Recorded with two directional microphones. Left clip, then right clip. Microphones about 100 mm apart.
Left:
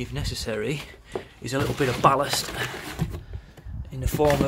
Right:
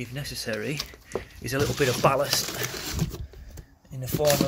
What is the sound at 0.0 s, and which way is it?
Speech, 20° left (ahead or behind).